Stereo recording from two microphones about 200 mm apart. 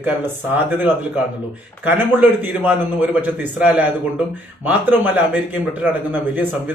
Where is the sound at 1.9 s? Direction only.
10° right (ahead or behind).